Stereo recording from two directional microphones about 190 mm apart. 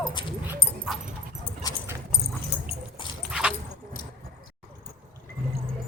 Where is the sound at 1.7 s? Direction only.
20° left (ahead or behind).